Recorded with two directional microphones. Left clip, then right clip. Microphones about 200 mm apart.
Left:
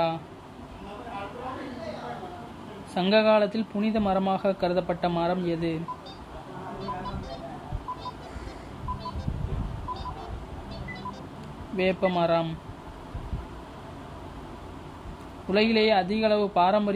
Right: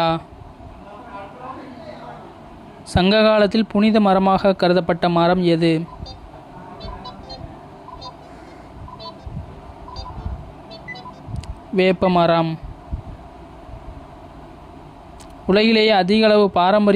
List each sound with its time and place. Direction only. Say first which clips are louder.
2.9 s speech: right 6 dB; 35° right (ahead or behind)
11.7 s speech: right 9 dB; 35° right (ahead or behind)
15.4 s speech: right 8 dB; 35° right (ahead or behind)